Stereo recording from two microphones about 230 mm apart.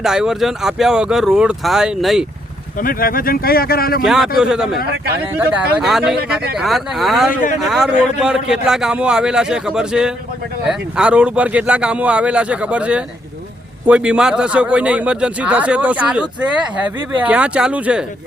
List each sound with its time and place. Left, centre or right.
0.0 s a man's voice: centre
2.7 s speech: left
4.0 s a man's voice: centre
6.1 s speech: right
6.6 s a man's voice: centre